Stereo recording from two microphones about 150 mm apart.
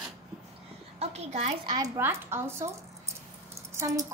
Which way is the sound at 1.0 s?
45° right (ahead or behind).